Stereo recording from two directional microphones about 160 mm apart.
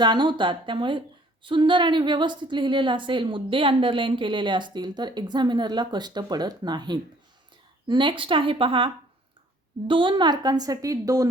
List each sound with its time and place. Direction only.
0.0 s a woman's voice: 30° right (ahead or behind)